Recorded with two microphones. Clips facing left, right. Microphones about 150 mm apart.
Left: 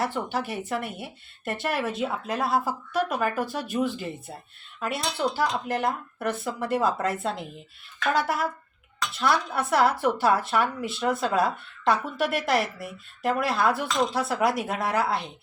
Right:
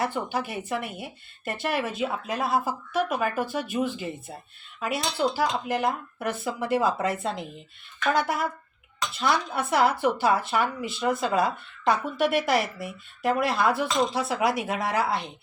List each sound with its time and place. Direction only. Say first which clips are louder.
0.0 s speech: even; centre (ahead or behind)